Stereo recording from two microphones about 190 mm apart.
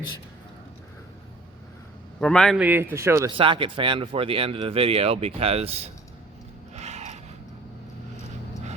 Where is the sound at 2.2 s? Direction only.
5° left (ahead or behind).